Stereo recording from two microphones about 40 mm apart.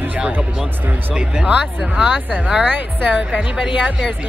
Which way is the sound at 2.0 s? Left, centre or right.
Right.